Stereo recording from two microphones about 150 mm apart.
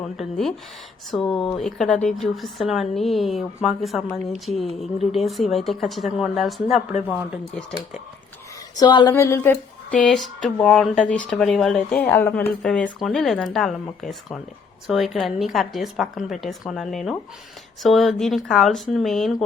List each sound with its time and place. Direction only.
0.2 s a woman's voice: centre (ahead or behind)
5.1 s a woman's voice: centre (ahead or behind)
8.7 s a sound: 30° left (ahead or behind)
9.1 s a woman's voice: 20° left (ahead or behind); by 19.5 s centre (ahead or behind)